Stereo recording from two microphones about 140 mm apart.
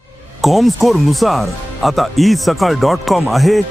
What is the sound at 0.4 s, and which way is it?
Speech, centre (ahead or behind).